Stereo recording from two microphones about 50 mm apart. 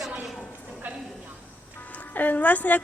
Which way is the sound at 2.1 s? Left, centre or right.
Left.